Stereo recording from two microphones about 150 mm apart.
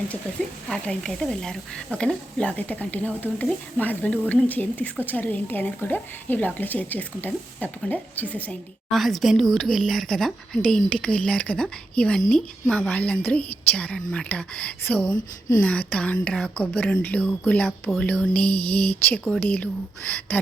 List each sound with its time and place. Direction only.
0.7 s speech: 5° left (ahead or behind)
15.1 s speech: 25° left (ahead or behind)
15.9 s speech: 10° left (ahead or behind)